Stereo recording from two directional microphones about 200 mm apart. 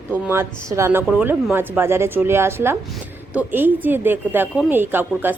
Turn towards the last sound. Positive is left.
turn(degrees=-10)  # may be behind; listen again after turning